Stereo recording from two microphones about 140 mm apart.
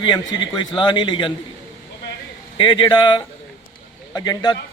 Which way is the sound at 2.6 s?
35° left (ahead or behind).